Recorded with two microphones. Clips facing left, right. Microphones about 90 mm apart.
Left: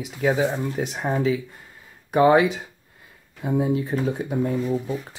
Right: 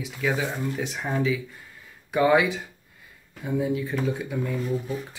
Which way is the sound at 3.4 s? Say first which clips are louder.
Left 3 dB; 40° left (ahead or behind).